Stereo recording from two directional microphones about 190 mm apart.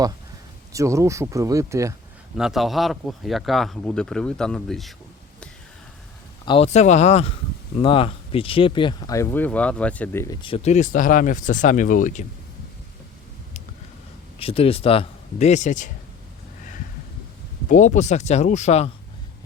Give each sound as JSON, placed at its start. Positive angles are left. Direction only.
{"t": 0.7, "sound": "speech", "side_deg": -15}
{"t": 2.3, "sound": "speech", "side_deg": 0}
{"t": 6.4, "sound": "a man's voice", "side_deg": 30}
{"t": 10.4, "sound": "speech", "side_deg": 30}
{"t": 14.3, "sound": "a man's voice", "side_deg": 30}
{"t": 17.7, "sound": "a man's voice", "side_deg": 40}